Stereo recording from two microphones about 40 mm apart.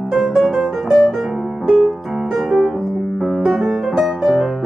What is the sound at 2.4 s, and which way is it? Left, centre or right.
Music, centre.